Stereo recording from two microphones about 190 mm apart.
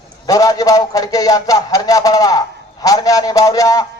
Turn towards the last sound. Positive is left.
turn(degrees=20)  # may be behind; listen again after turning